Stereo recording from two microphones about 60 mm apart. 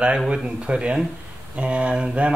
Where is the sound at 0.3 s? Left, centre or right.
Centre.